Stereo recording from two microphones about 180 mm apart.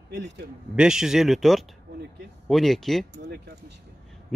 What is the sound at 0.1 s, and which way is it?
Speech, 70° right (ahead or behind).